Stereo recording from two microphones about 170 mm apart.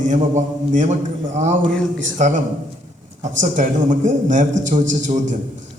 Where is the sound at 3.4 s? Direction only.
50° right (ahead or behind).